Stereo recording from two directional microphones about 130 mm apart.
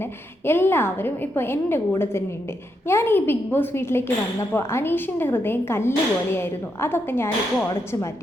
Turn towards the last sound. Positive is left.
turn(degrees=20)  # may be behind; listen again after turning